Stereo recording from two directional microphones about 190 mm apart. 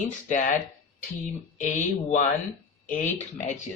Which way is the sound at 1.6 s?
40° left (ahead or behind).